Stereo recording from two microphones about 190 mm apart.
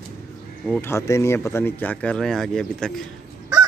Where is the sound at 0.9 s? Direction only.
15° left (ahead or behind).